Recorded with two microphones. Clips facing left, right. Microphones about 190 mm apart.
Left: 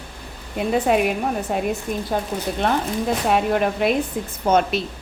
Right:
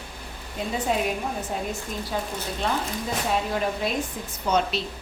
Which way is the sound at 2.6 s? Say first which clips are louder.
Left 6 dB; 60° left (ahead or behind).